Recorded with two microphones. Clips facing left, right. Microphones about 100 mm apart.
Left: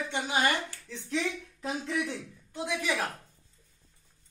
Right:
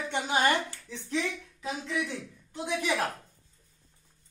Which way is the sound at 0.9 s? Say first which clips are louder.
Even; centre (ahead or behind).